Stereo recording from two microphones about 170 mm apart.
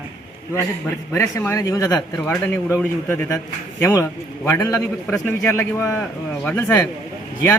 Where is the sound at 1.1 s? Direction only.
15° left (ahead or behind).